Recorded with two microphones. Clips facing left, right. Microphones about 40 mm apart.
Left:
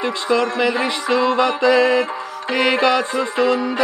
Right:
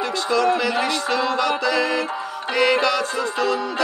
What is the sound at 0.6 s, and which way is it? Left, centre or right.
Music, left.